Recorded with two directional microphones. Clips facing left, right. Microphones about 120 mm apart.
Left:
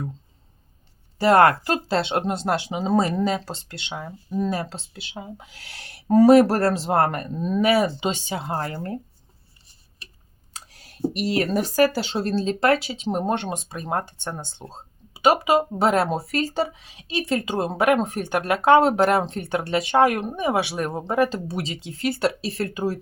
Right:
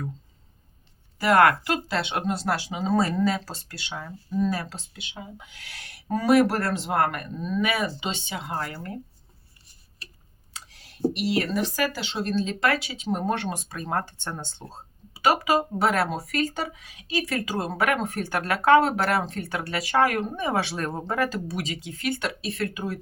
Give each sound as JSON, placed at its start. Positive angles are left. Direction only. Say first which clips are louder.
{"t": 1.2, "sound": "speech", "louder": "left 3 dB", "side_deg": 30}
{"t": 10.5, "sound": "speech", "louder": "left 2 dB", "side_deg": 40}